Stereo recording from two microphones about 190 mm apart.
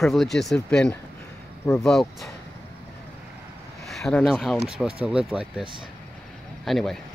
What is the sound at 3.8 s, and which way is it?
Speech, centre (ahead or behind).